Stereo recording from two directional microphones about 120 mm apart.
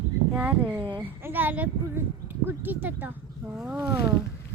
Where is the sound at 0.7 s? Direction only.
40° right (ahead or behind).